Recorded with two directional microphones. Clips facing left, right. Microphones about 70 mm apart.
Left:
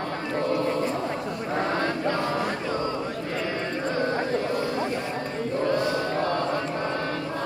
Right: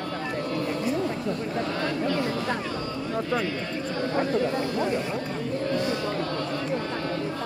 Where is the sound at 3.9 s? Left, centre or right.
Left.